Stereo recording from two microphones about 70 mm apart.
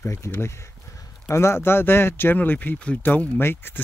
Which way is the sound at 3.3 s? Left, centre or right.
Left.